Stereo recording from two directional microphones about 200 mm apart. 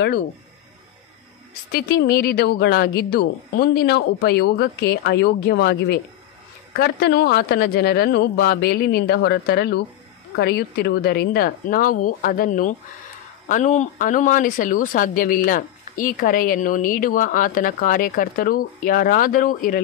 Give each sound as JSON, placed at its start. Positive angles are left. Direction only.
{"t": 1.7, "sound": "speech", "side_deg": 50}